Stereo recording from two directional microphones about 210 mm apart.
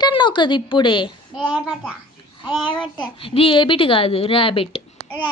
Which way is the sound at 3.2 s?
25° left (ahead or behind).